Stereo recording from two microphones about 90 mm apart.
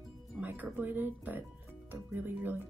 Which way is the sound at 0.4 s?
20° right (ahead or behind).